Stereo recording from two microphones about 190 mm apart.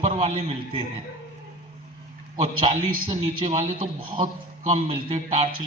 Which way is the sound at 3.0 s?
35° right (ahead or behind).